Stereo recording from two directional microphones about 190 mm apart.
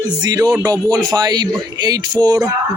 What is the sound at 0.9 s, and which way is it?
Speech, 20° right (ahead or behind).